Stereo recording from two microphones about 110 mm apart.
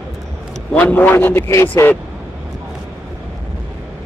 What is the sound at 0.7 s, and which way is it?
A man's voice, 15° left (ahead or behind).